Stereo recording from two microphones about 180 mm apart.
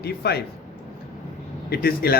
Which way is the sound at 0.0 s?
65° left (ahead or behind).